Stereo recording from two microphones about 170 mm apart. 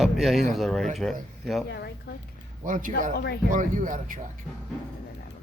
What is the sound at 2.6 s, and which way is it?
Speech, 50° right (ahead or behind).